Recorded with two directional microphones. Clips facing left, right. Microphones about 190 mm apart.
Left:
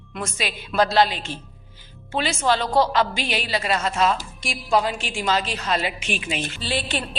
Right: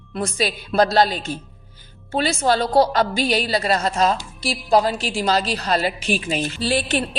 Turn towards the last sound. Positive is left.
turn(degrees=-45)  # may be behind; listen again after turning